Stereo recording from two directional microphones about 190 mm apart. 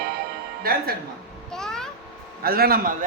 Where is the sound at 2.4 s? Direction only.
50° right (ahead or behind).